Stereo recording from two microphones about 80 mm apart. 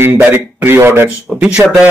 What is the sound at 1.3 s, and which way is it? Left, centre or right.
Speech, centre.